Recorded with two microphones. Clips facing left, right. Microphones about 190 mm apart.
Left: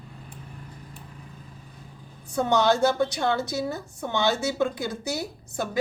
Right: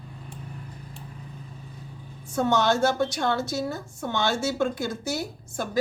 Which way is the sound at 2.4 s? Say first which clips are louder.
Left 1 dB; 15° left (ahead or behind).